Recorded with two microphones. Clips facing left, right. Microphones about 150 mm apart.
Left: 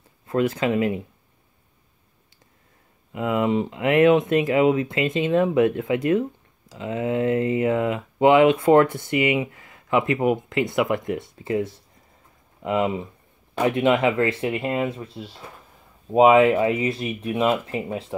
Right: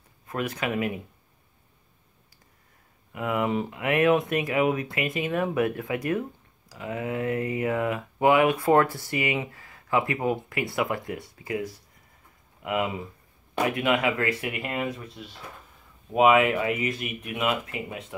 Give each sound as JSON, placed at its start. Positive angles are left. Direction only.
{"t": 0.3, "sound": "speech", "side_deg": 30}
{"t": 3.1, "sound": "speech", "side_deg": 25}